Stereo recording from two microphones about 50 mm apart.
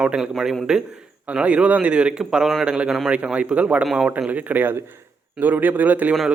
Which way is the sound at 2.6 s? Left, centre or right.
Centre.